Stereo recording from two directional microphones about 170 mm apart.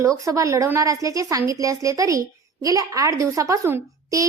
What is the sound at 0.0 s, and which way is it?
A woman's voice, 20° right (ahead or behind).